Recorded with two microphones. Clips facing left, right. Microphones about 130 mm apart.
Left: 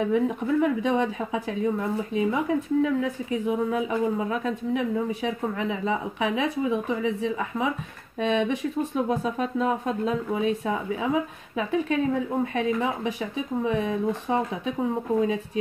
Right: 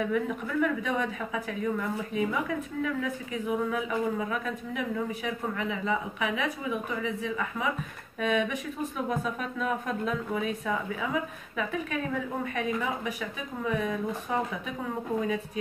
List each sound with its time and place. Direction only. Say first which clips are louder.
0.0 s a woman's voice: left 5 dB; 30° left (ahead or behind)